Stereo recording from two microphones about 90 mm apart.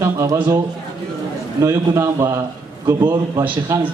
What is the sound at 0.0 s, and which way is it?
Speech, 40° right (ahead or behind).